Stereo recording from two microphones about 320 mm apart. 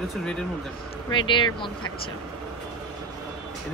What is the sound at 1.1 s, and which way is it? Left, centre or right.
Speech, centre.